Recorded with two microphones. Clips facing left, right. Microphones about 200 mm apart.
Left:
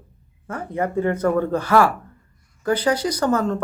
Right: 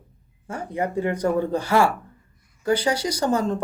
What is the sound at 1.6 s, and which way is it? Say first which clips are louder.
Speech: left 3 dB; 25° right (ahead or behind).